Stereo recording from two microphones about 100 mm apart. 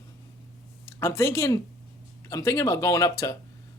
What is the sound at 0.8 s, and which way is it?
Speech, 25° left (ahead or behind).